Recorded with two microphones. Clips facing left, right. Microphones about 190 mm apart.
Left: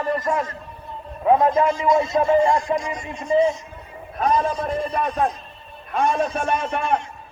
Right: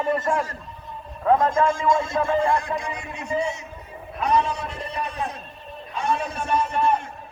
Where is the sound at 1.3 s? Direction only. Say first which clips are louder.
Left 2 dB; 20° left (ahead or behind).